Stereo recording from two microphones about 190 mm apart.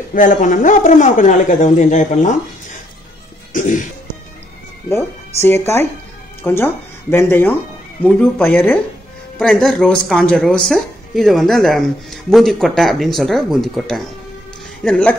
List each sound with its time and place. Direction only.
0.1 s speech: 45° left (ahead or behind)
3.5 s music: 45° left (ahead or behind)
4.8 s speech: 15° left (ahead or behind)